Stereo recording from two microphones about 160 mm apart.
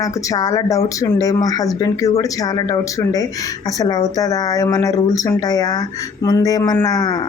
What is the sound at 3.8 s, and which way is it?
Speech, 20° left (ahead or behind).